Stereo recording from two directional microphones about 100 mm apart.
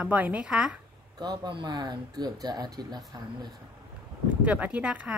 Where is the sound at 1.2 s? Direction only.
45° right (ahead or behind).